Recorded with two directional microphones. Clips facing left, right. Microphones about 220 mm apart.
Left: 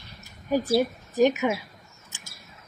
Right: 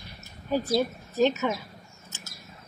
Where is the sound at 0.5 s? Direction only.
15° left (ahead or behind).